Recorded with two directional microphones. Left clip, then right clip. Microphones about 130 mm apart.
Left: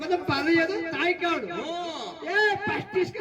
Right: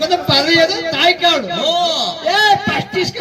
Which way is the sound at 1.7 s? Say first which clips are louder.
Right 17 dB; 20° left (ahead or behind).